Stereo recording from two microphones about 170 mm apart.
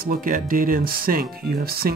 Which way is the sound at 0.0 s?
55° right (ahead or behind).